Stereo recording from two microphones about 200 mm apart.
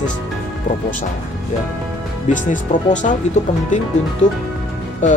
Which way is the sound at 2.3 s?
40° left (ahead or behind).